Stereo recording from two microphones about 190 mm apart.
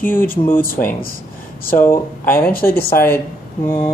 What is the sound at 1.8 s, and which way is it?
Speech, 10° left (ahead or behind).